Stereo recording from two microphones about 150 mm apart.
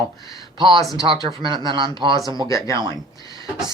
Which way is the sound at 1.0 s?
35° right (ahead or behind).